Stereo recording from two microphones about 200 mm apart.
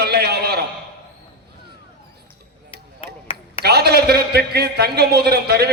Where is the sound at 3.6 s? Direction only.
50° right (ahead or behind).